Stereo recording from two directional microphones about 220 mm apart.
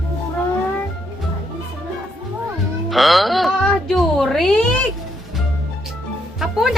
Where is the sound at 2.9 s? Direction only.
Centre (ahead or behind).